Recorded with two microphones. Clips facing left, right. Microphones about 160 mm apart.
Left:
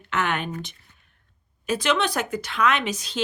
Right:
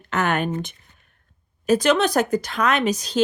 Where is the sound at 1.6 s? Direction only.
40° right (ahead or behind).